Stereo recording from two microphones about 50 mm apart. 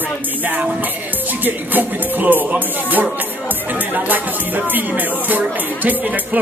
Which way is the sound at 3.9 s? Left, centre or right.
Right.